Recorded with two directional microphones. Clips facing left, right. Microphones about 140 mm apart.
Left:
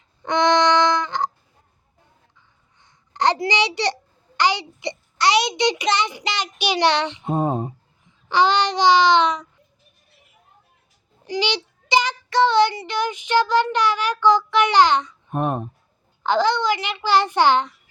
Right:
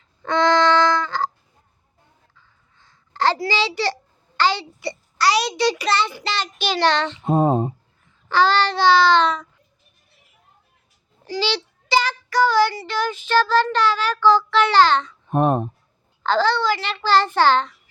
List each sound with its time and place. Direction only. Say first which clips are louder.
0.2 s music: even; 20° left (ahead or behind)
2.3 s a sound: right 1 dB; 20° left (ahead or behind)
4.4 s a child's voice: even; 15° left (ahead or behind)
7.3 s speech: right 6 dB; 35° right (ahead or behind)
8.0 s a sound: even; 15° left (ahead or behind)
11.3 s child singing: even; 15° left (ahead or behind)
15.3 s speech: right 5 dB; 35° right (ahead or behind)
16.2 s child singing: even; 15° left (ahead or behind)